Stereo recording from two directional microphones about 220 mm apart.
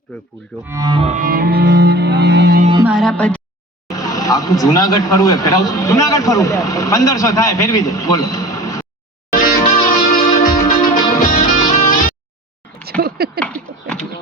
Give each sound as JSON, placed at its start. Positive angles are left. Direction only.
{"t": 0.7, "sound": "cello", "side_deg": -20}
{"t": 2.8, "sound": "speech", "side_deg": 0}
{"t": 3.8, "sound": "speech", "side_deg": 15}
{"t": 9.3, "sound": "music", "side_deg": 40}
{"t": 12.8, "sound": "a sound", "side_deg": -45}
{"t": 13.4, "sound": "a sound", "side_deg": 5}